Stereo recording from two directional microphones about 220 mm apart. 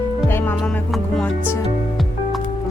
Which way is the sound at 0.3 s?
10° left (ahead or behind).